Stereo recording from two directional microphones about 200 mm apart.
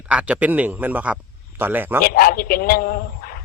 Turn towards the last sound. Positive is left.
turn(degrees=50)  # may be behind; listen again after turning